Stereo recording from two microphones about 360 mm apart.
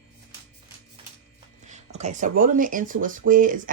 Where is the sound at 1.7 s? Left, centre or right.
Centre.